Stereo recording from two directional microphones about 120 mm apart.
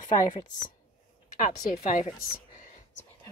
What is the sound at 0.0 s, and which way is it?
Speech, 90° left.